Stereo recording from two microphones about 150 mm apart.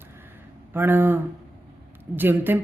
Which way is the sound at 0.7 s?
15° right (ahead or behind).